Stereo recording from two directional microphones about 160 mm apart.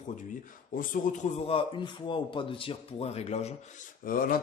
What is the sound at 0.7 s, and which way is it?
Speech, 55° left (ahead or behind).